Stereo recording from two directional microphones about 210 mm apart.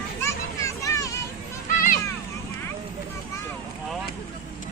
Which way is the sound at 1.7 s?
40° left (ahead or behind).